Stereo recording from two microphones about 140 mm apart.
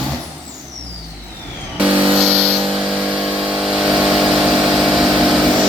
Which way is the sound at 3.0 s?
10° right (ahead or behind).